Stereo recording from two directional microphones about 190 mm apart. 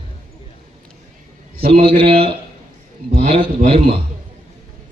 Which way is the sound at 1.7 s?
30° right (ahead or behind).